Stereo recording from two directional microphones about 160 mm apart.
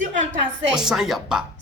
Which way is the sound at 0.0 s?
50° right (ahead or behind).